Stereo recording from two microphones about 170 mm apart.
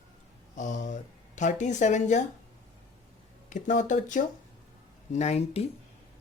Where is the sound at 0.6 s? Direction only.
45° left (ahead or behind).